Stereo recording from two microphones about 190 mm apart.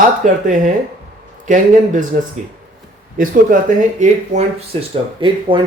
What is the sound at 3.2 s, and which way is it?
Speech, 40° right (ahead or behind).